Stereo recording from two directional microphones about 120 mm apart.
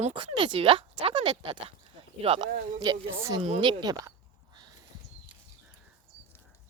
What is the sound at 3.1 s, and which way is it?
Speech, 25° right (ahead or behind).